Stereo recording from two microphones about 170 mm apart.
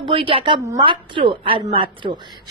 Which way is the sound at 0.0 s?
30° right (ahead or behind).